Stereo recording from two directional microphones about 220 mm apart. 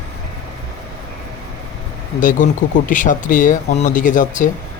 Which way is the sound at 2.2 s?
35° left (ahead or behind).